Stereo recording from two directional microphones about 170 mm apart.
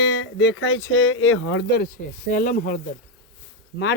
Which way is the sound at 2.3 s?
50° left (ahead or behind).